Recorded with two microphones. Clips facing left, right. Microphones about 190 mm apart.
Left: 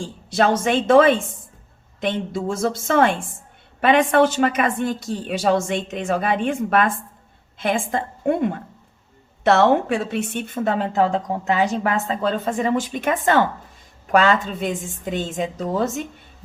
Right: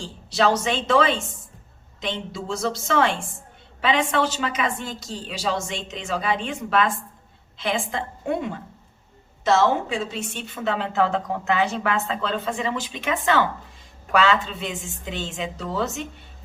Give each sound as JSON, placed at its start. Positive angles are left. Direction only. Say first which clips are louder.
{"t": 0.0, "sound": "a woman's voice", "louder": "left 2 dB", "side_deg": 50}